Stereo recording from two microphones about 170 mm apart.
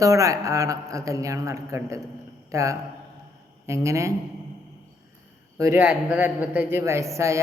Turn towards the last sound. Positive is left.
turn(degrees=-15)  # may be behind; listen again after turning